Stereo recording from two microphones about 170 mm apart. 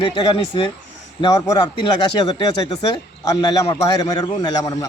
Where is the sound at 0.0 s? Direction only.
25° left (ahead or behind).